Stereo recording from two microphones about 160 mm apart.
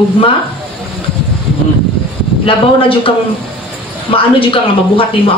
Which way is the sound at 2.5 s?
35° left (ahead or behind).